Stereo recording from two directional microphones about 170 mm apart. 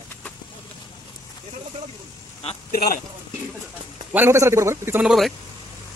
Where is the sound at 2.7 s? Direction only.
60° left (ahead or behind).